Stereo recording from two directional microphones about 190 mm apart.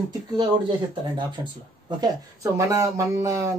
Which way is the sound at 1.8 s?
20° right (ahead or behind).